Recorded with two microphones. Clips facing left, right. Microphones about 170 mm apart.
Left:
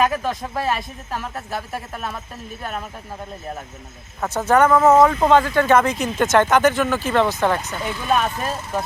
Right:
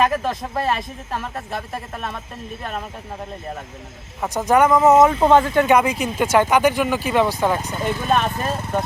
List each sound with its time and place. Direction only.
0.0 s a man's voice: centre (ahead or behind)
4.2 s speech: 10° right (ahead or behind)
7.9 s speech: 45° right (ahead or behind)
8.1 s a man's voice: centre (ahead or behind)